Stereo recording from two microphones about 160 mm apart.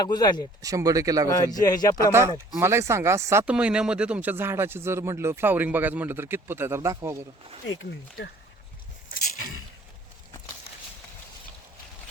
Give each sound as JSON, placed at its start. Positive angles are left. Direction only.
{"t": 0.0, "sound": "speech", "side_deg": 25}
{"t": 0.6, "sound": "speech", "side_deg": -20}
{"t": 1.5, "sound": "speech", "side_deg": 25}
{"t": 2.6, "sound": "speech", "side_deg": -15}